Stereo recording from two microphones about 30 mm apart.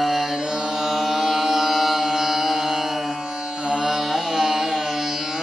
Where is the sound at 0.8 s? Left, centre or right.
Centre.